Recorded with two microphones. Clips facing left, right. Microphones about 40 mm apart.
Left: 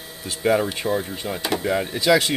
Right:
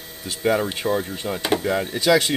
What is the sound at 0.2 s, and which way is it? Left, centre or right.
Speech, centre.